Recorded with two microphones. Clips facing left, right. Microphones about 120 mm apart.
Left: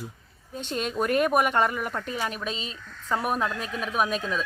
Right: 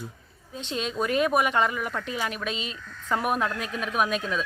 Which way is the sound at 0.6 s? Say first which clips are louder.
Left 1 dB; 50° left (ahead or behind).